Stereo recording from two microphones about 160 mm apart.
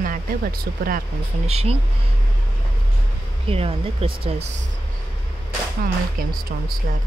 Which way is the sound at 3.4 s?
35° right (ahead or behind).